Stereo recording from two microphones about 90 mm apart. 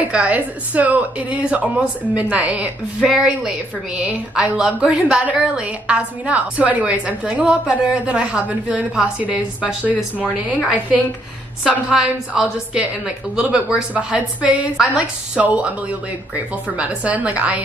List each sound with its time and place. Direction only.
0.0 s a woman's voice: 15° right (ahead or behind)